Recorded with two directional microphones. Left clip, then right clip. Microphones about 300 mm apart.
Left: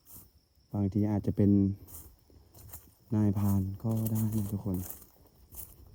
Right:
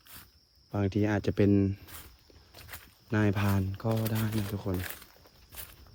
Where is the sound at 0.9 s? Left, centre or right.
Left.